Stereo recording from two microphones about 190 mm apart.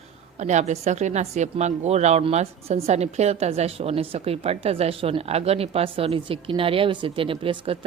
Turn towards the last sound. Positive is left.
turn(degrees=-30)  # may be behind; listen again after turning